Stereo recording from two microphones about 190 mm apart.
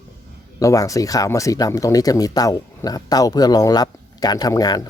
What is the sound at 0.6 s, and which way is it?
A man's voice, 15° left (ahead or behind).